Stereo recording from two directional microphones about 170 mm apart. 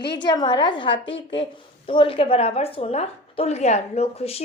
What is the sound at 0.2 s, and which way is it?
A woman's voice, 25° left (ahead or behind).